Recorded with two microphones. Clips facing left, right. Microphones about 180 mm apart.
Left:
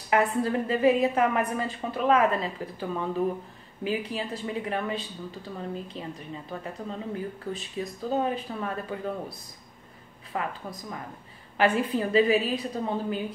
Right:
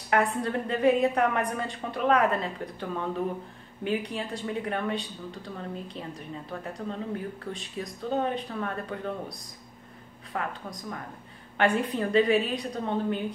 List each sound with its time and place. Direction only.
0.1 s speech: 5° left (ahead or behind)
10.3 s speech: 5° left (ahead or behind)